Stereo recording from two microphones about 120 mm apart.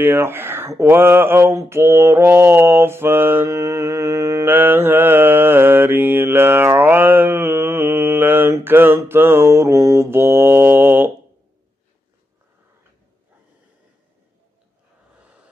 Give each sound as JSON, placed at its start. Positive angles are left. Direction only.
{"t": 0.0, "sound": "speech", "side_deg": -20}